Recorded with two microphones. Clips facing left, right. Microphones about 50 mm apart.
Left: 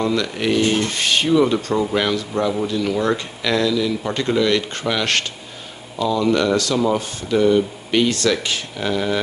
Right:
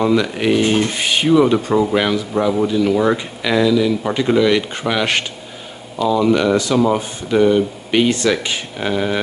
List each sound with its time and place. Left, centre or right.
0.0 s speech: centre